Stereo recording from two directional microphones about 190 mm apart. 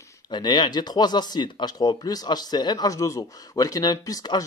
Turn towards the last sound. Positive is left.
turn(degrees=20)  # may be behind; listen again after turning